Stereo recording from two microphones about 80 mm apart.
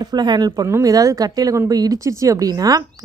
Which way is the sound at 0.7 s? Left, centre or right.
Right.